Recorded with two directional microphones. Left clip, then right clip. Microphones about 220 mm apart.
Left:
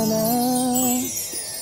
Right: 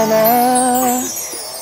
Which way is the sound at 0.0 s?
15° right (ahead or behind).